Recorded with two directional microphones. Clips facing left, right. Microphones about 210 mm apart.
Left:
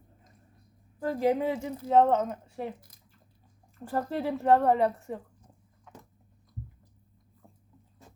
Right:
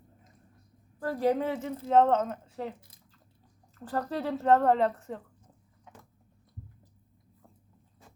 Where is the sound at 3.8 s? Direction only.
15° left (ahead or behind).